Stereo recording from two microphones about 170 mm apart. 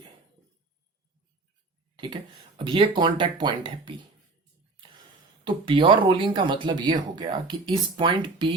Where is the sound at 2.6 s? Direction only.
30° right (ahead or behind).